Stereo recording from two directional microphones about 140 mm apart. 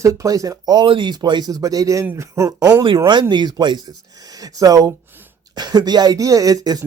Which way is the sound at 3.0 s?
30° right (ahead or behind).